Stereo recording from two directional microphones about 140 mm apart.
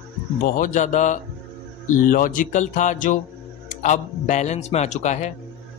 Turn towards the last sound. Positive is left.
turn(degrees=55)  # may be behind; listen again after turning